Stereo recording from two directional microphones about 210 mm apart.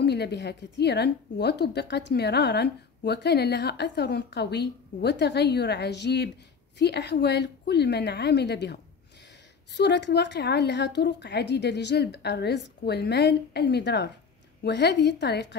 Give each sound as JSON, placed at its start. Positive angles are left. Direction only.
{"t": 0.0, "sound": "a woman's voice", "side_deg": 50}
{"t": 9.8, "sound": "a woman's voice", "side_deg": 55}